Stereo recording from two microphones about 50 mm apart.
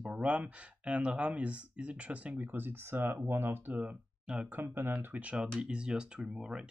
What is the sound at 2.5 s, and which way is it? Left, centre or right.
Speech, right.